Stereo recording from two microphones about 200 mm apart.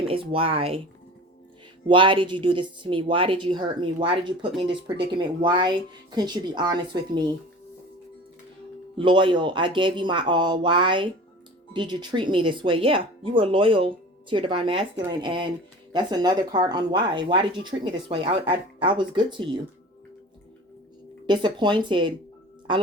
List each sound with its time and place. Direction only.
0.1 s speech: 25° right (ahead or behind)
1.9 s speech: 25° right (ahead or behind)
9.0 s speech: 25° right (ahead or behind)
21.2 s speech: 20° right (ahead or behind)